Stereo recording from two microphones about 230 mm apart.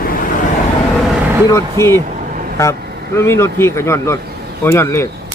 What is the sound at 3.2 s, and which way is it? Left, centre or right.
A man's voice, centre.